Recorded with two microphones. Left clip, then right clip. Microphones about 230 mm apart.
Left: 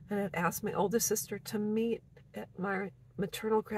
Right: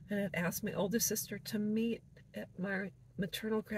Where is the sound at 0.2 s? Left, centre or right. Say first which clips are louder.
Left 5 dB; centre.